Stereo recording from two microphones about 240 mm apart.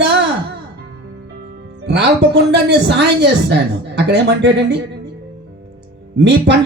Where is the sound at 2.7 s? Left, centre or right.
Right.